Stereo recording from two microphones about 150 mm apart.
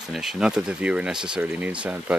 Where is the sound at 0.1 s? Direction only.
5° right (ahead or behind).